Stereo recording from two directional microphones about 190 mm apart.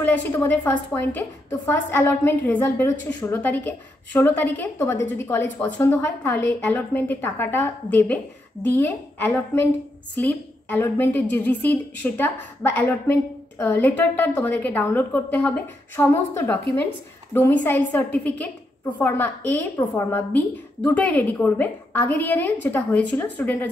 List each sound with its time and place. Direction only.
0.0 s a woman's voice: 10° left (ahead or behind)